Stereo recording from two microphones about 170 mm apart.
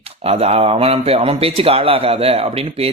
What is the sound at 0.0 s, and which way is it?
Speech, 35° right (ahead or behind).